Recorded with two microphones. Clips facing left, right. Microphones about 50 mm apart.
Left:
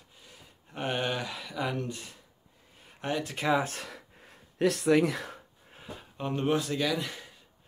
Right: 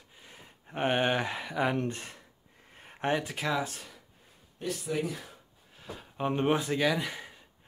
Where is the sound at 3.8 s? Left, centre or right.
Left.